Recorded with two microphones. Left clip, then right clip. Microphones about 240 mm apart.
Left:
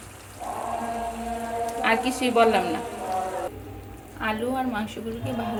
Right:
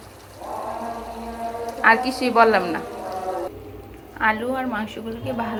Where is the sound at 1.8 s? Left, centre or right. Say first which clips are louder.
Right 7 dB; centre.